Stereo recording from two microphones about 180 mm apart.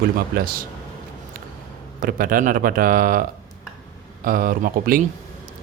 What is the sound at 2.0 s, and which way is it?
Speech, 50° right (ahead or behind).